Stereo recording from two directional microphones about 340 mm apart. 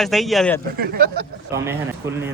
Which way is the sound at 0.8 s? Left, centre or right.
Right.